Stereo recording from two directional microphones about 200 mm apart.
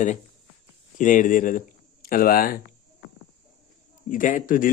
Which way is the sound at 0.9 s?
40° left (ahead or behind).